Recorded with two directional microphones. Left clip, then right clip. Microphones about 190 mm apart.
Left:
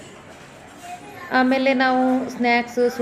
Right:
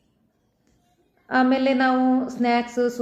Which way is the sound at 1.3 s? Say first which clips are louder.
Left 2 dB; 25° left (ahead or behind).